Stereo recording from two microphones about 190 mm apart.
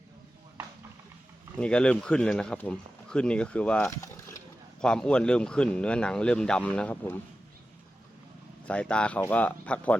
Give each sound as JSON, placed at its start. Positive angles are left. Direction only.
{"t": 1.5, "sound": "speech", "side_deg": 5}
{"t": 4.0, "sound": "a sound", "side_deg": 15}
{"t": 4.8, "sound": "speech", "side_deg": 5}
{"t": 8.6, "sound": "speech", "side_deg": 5}